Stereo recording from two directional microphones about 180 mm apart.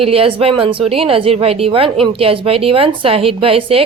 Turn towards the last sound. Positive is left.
turn(degrees=-30)  # may be behind; listen again after turning